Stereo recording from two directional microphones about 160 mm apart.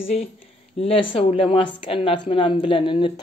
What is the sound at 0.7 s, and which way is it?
A woman's voice, 35° left (ahead or behind).